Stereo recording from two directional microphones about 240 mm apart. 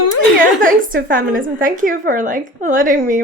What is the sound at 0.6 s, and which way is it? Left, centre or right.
A woman's voice, right.